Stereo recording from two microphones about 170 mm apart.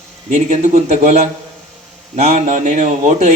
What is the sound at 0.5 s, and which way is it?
A man's voice, 45° right (ahead or behind).